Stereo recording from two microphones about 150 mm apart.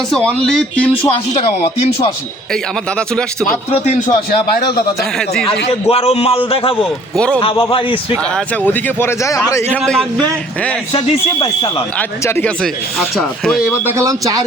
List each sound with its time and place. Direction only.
0.1 s speech: 5° left (ahead or behind)
3.7 s speech: 50° left (ahead or behind)
5.9 s a man's voice: 40° left (ahead or behind)
8.6 s speech: 15° left (ahead or behind)
9.8 s speech: 5° left (ahead or behind)
10.9 s a man's voice: 30° left (ahead or behind)
11.9 s speech: 15° left (ahead or behind)
12.6 s speech: centre (ahead or behind)
13.8 s speech: 20° right (ahead or behind)